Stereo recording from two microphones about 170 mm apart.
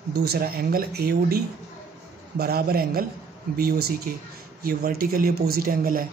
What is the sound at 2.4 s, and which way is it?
A man's voice, 65° right (ahead or behind).